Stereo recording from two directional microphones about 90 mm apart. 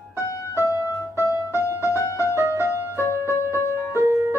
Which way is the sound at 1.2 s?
35° left (ahead or behind).